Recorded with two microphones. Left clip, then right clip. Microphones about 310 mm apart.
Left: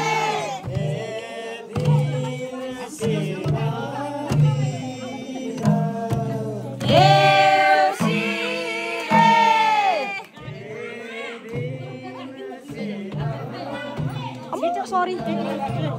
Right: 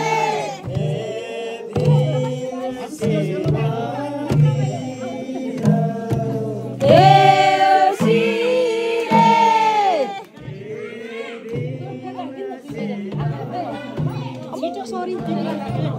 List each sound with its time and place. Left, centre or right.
0.0 s a sound: centre
1.8 s music: centre
6.9 s music: left
7.4 s music: centre
14.8 s music: left
15.2 s music: centre